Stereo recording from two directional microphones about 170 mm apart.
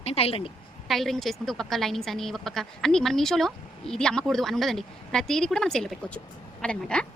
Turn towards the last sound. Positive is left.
turn(degrees=5)  # may be behind; listen again after turning